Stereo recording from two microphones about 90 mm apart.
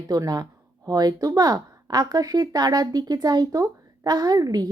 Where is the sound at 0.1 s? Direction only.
45° right (ahead or behind).